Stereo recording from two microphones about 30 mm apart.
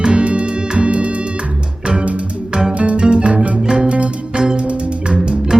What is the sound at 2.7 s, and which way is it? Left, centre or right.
Music, right.